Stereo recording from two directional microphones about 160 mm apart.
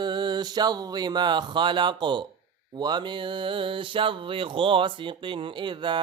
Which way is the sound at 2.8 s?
25° right (ahead or behind).